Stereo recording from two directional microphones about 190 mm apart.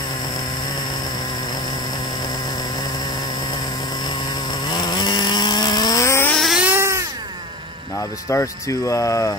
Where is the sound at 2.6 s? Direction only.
20° left (ahead or behind).